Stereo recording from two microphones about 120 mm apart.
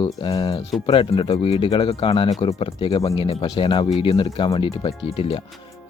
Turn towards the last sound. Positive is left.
turn(degrees=50)  # may be behind; listen again after turning